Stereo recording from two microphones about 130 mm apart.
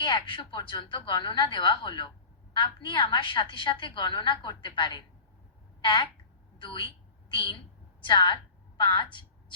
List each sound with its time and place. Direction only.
0.0 s a woman's voice: 40° left (ahead or behind)
8.0 s a woman's voice: 35° left (ahead or behind)